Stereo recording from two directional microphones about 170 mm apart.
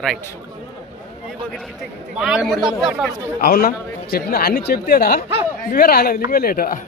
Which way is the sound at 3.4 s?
60° left (ahead or behind).